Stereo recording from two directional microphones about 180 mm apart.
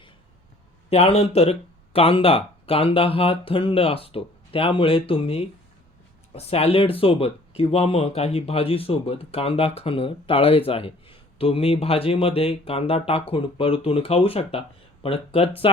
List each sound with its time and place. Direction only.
0.9 s speech: 35° left (ahead or behind)